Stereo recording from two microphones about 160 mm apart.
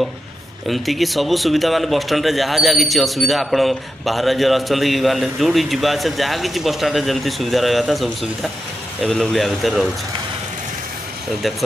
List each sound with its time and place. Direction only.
0.7 s speech: centre (ahead or behind)